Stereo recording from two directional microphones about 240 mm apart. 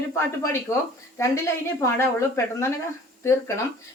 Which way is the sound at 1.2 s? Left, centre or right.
Centre.